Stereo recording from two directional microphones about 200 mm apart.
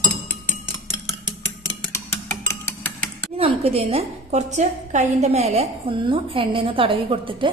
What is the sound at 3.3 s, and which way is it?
A woman's voice, 30° right (ahead or behind).